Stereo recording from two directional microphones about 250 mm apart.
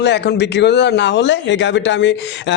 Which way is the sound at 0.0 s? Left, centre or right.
Left.